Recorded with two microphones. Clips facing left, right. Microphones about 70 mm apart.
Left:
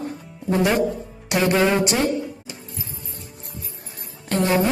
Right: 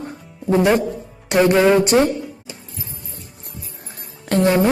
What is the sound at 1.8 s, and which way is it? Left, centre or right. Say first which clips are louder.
Speech: right 6 dB; right.